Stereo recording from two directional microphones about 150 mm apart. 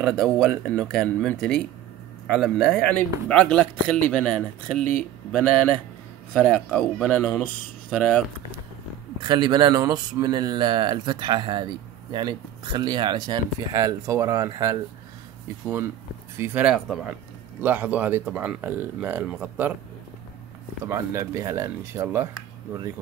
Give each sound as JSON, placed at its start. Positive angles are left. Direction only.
{"t": 0.0, "sound": "speech", "side_deg": 5}
{"t": 2.3, "sound": "speech", "side_deg": 0}
{"t": 9.2, "sound": "speech", "side_deg": -30}
{"t": 16.3, "sound": "speech", "side_deg": -10}
{"t": 20.8, "sound": "speech", "side_deg": -20}